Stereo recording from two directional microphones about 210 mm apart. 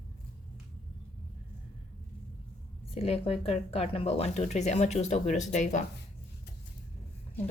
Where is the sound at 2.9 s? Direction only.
30° left (ahead or behind).